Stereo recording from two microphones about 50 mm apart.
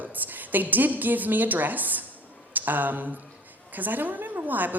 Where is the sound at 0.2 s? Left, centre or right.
Right.